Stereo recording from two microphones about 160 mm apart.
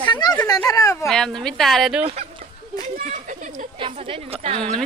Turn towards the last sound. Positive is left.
turn(degrees=-35)  # may be behind; listen again after turning